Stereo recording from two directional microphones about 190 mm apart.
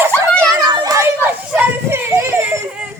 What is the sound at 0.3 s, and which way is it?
Children playing, 25° right (ahead or behind).